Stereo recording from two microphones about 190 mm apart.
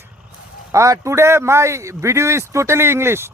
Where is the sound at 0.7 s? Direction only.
15° right (ahead or behind).